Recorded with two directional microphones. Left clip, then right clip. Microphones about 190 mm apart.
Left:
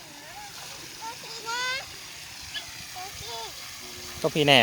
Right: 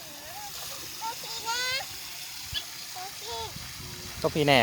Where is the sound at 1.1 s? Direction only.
55° right (ahead or behind).